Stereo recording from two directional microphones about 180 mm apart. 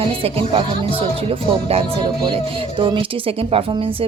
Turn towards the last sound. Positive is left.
turn(degrees=-30)  # may be behind; listen again after turning